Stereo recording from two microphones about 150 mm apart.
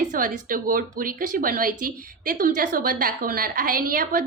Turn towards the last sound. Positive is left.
turn(degrees=-70)  # may be behind; listen again after turning